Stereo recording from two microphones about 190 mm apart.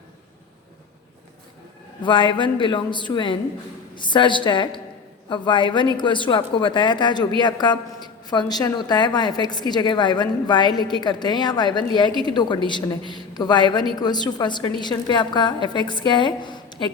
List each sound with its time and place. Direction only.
2.0 s a woman's voice: 25° left (ahead or behind)